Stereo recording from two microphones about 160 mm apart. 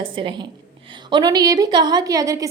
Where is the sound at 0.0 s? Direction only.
30° right (ahead or behind).